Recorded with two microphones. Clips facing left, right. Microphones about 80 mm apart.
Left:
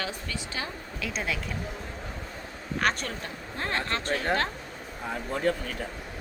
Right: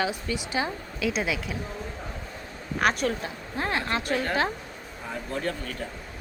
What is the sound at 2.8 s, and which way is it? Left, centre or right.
Speech, centre.